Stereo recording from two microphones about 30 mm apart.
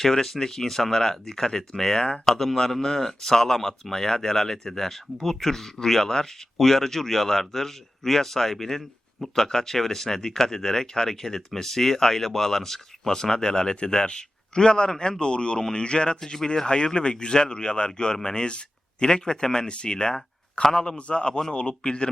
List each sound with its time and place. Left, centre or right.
0.0 s speech: centre
2.3 s a man's voice: centre; by 16.1 s left
16.2 s speech: centre
16.6 s speech: left
18.4 s a man's voice: left